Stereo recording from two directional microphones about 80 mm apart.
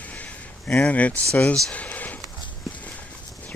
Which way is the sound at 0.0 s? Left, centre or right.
Centre.